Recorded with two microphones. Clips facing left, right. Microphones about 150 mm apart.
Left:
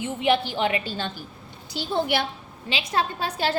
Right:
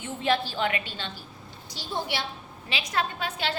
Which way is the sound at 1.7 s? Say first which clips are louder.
Left 7 dB; 60° left (ahead or behind).